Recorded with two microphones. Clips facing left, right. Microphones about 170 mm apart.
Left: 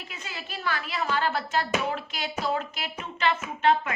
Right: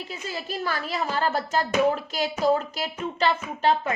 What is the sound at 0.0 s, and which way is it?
Speech, 35° right (ahead or behind).